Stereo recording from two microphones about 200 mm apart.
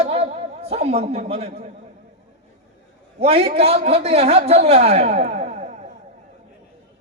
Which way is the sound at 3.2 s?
30° right (ahead or behind).